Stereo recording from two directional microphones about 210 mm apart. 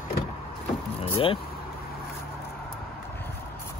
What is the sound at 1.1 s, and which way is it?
Speech, 25° left (ahead or behind).